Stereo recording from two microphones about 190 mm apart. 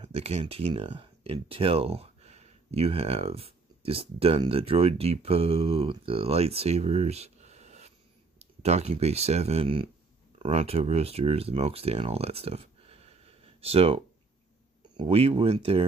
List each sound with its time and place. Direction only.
0.0 s speech: 35° right (ahead or behind)